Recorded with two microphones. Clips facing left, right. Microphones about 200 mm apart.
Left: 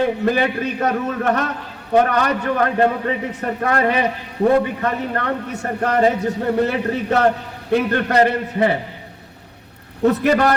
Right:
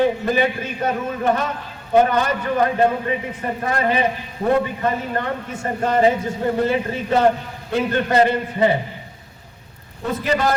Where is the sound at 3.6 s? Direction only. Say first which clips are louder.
Left 2 dB; 65° left (ahead or behind).